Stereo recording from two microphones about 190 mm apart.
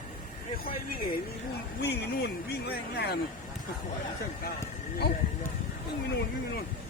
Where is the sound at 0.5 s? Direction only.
50° left (ahead or behind).